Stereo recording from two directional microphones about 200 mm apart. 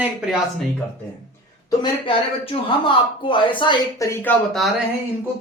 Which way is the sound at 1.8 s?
25° left (ahead or behind).